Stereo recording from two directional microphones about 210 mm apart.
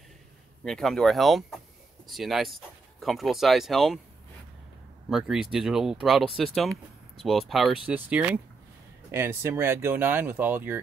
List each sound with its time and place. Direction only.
0.7 s speech: 5° left (ahead or behind)
5.1 s speech: centre (ahead or behind)